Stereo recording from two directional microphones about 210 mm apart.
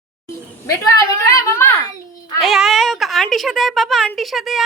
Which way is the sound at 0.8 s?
15° left (ahead or behind).